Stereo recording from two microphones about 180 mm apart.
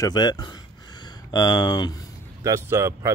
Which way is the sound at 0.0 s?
25° left (ahead or behind).